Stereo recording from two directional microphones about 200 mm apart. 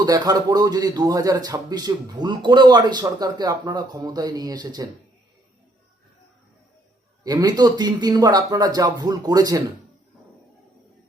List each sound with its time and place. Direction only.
0.0 s a man's voice: 20° right (ahead or behind)
7.3 s a man's voice: 20° right (ahead or behind)